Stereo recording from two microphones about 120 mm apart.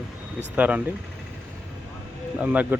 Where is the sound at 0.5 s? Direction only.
10° right (ahead or behind).